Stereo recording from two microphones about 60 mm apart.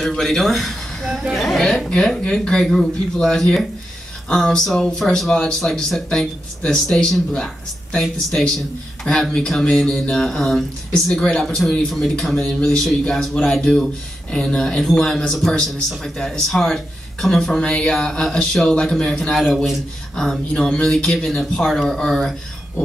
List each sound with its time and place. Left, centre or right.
0.0 s speech: centre
12.4 s speech: centre
12.8 s speech: centre